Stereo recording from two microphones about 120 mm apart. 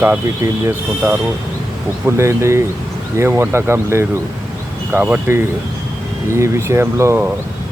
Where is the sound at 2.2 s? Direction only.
25° right (ahead or behind).